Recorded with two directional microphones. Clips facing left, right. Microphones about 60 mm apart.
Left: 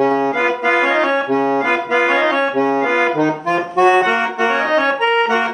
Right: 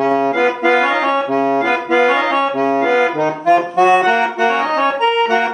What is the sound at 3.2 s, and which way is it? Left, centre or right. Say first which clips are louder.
Accordion: right 3 dB; centre.